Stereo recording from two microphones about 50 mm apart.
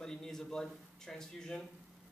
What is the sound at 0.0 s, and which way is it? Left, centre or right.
A man's voice, centre.